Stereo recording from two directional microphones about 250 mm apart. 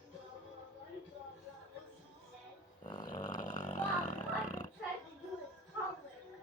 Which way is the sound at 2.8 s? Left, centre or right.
Centre.